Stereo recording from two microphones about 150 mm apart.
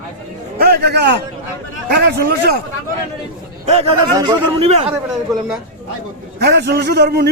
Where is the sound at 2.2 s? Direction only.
90° right.